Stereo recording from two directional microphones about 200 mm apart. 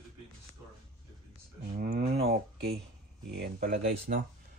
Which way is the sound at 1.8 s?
50° right (ahead or behind).